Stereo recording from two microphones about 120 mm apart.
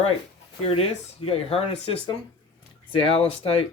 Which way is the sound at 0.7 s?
50° left (ahead or behind).